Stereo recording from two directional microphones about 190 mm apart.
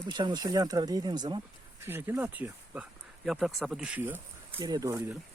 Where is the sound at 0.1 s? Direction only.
25° right (ahead or behind).